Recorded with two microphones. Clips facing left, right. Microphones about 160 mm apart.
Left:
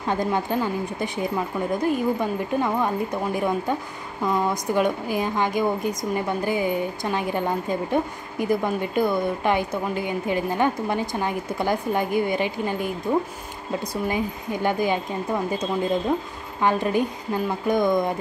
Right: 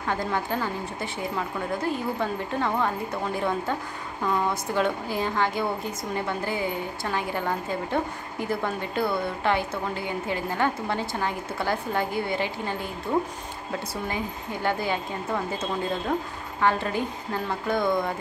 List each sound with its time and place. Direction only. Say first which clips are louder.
0.0 s speech: left 4 dB; 20° left (ahead or behind)
4.7 s speech: left 3 dB; 15° left (ahead or behind)
16.6 s speech: left 3 dB; 15° left (ahead or behind)